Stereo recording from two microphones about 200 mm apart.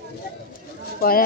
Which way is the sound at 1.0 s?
50° left (ahead or behind).